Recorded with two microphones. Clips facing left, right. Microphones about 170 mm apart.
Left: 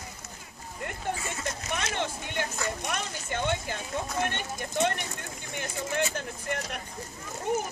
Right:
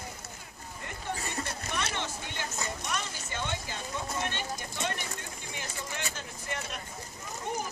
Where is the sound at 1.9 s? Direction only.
55° left (ahead or behind).